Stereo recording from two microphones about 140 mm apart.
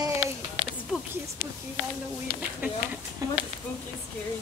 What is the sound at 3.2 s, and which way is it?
Speech, 25° right (ahead or behind).